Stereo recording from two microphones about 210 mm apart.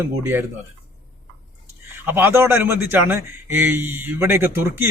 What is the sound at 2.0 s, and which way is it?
Speech, 10° right (ahead or behind).